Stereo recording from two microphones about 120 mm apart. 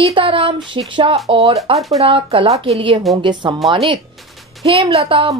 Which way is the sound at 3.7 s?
50° right (ahead or behind).